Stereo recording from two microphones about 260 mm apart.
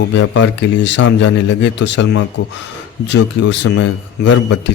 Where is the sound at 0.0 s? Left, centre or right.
Left.